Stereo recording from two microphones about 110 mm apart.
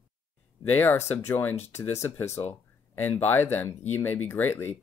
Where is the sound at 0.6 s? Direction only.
15° left (ahead or behind).